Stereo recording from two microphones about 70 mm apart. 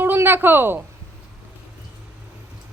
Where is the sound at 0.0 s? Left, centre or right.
Right.